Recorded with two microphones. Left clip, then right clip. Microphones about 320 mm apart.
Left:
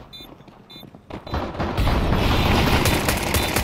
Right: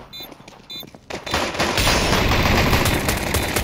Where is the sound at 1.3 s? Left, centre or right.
Right.